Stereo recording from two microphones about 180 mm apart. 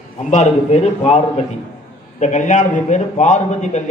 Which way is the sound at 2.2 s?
40° left (ahead or behind).